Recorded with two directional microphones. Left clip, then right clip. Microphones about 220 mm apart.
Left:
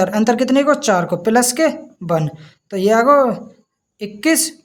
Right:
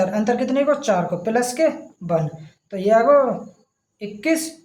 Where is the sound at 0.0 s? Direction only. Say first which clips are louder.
Left 4 dB; 45° left (ahead or behind).